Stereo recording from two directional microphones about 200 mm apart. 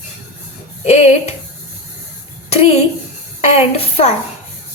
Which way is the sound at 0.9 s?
35° left (ahead or behind).